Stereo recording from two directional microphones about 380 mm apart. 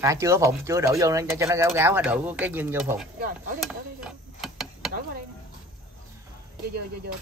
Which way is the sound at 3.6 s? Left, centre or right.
Centre.